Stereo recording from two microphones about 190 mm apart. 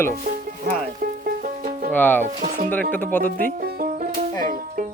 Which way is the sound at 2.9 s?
10° left (ahead or behind).